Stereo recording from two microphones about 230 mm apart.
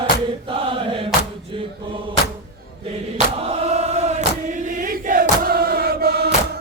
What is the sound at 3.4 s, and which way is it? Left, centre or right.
Chant, right.